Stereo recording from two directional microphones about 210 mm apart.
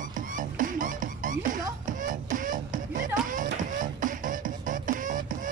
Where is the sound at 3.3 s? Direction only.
40° right (ahead or behind).